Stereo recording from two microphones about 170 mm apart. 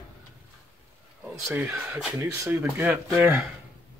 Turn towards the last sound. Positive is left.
turn(degrees=-10)  # may be behind; listen again after turning